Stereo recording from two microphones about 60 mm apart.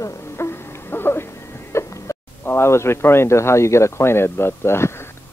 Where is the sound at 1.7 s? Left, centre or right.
Left.